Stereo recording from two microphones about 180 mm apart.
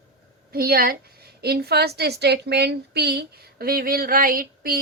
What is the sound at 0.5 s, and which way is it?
A woman's voice, 55° right (ahead or behind).